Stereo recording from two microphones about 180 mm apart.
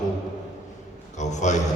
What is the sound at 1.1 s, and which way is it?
Speech, 40° left (ahead or behind).